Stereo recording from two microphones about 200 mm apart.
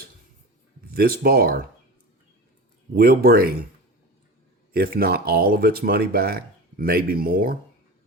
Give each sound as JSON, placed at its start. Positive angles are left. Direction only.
{"t": 0.9, "sound": "speech", "side_deg": -50}
{"t": 2.9, "sound": "speech", "side_deg": -50}
{"t": 4.7, "sound": "speech", "side_deg": -50}